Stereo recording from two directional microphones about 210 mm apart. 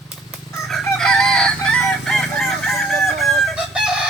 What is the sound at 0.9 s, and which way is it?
Chicken, centre (ahead or behind).